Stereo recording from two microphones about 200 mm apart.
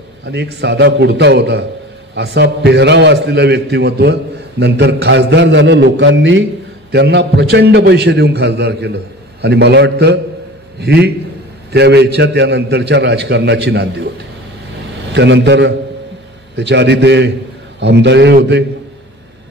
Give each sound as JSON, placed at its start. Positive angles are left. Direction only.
{"t": 0.2, "sound": "a man's voice", "side_deg": -60}
{"t": 15.1, "sound": "a man's voice", "side_deg": -60}